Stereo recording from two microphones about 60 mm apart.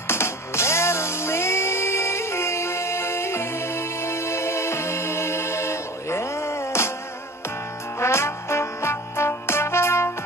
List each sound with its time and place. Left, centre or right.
0.1 s music: left
8.0 s music: left